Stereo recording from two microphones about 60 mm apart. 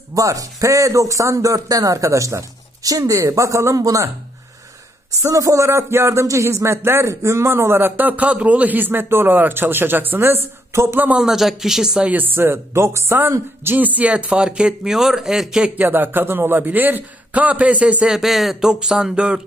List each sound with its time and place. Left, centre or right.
0.1 s speech: right
3.2 s speech: right
5.3 s speech: right
5.7 s a man's voice: right
10.7 s a man's voice: right
11.1 s a man's voice: centre
12.1 s a man's voice: right
12.7 s speech: right
13.8 s a man's voice: right
15.7 s a man's voice: right
18.0 s a man's voice: centre